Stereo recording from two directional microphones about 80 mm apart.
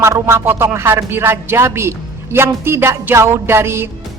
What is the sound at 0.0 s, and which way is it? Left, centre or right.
A man's voice, right.